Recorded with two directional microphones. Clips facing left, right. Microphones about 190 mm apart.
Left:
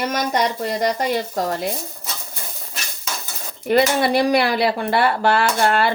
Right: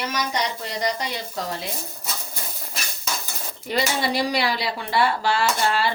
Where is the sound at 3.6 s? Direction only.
55° left (ahead or behind).